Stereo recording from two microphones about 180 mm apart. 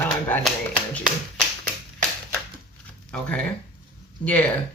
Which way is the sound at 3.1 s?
5° left (ahead or behind).